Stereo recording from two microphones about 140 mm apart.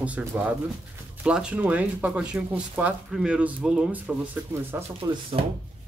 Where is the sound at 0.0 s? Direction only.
10° right (ahead or behind).